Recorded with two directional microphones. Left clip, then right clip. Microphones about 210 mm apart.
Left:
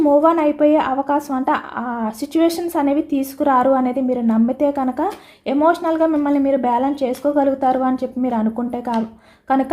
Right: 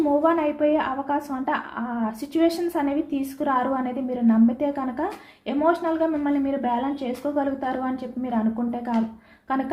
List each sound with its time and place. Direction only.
0.0 s a woman's voice: 50° left (ahead or behind)